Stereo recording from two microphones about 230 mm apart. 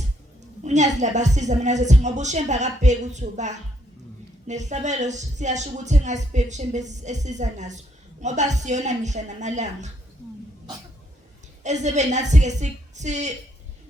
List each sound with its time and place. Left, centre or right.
0.6 s speech: right
11.6 s speech: right